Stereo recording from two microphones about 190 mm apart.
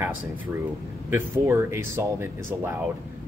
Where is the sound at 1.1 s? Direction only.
15° right (ahead or behind).